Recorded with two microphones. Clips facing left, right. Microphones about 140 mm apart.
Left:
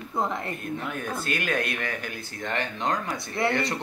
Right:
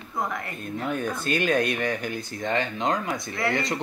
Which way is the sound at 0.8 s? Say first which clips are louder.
Right 4 dB; 25° right (ahead or behind).